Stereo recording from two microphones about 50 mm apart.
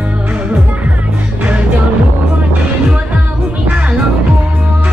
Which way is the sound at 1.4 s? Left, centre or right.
Right.